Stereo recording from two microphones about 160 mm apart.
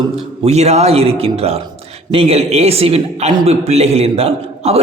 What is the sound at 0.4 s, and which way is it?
A man's voice, 45° right (ahead or behind).